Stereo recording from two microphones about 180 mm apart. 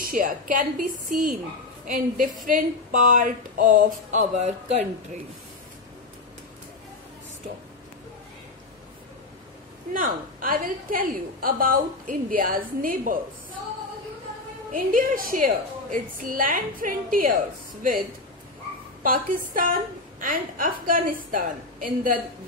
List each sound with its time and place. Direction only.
0.0 s a woman's voice: 50° right (ahead or behind)
1.9 s a woman's voice: 50° right (ahead or behind)
9.9 s a woman's voice: 50° right (ahead or behind)
14.7 s a woman's voice: 50° right (ahead or behind)
19.0 s a woman's voice: 50° right (ahead or behind)